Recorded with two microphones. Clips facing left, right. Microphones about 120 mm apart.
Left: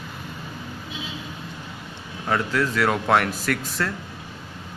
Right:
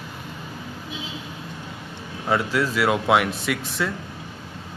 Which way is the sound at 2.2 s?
10° right (ahead or behind).